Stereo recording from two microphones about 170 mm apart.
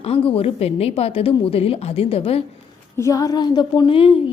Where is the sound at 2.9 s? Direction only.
20° left (ahead or behind).